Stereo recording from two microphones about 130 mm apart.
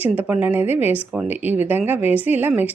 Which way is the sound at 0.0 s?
10° right (ahead or behind).